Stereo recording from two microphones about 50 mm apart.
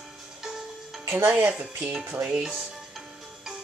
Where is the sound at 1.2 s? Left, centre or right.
Right.